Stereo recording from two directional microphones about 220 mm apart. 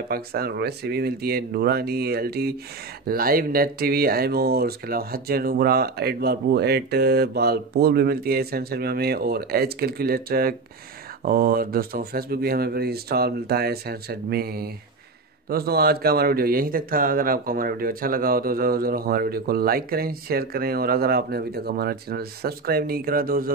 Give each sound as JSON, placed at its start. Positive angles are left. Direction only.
{"t": 0.1, "sound": "a man's voice", "side_deg": -45}